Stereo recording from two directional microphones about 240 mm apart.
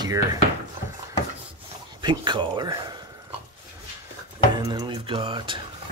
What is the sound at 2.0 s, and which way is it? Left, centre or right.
Speech, centre.